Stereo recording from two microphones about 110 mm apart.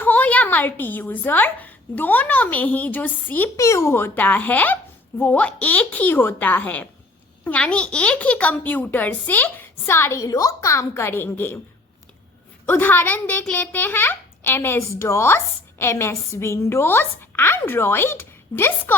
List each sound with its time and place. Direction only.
0.0 s speech: 15° left (ahead or behind)
3.6 s a child's voice: 25° left (ahead or behind)
12.6 s a woman's voice: 20° left (ahead or behind)